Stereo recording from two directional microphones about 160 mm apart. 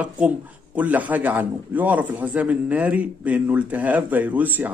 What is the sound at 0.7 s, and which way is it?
A man's voice, 10° right (ahead or behind).